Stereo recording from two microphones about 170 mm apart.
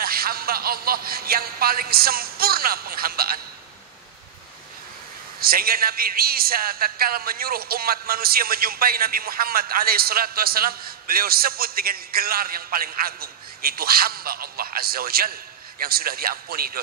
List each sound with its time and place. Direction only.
0.0 s a man's voice: 60° right (ahead or behind)
5.4 s a man's voice: 60° right (ahead or behind)